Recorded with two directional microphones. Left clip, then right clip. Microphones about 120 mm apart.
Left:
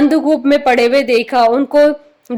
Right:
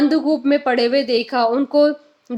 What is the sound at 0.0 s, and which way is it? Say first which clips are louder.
A woman's voice: left 5 dB; 35° left (ahead or behind).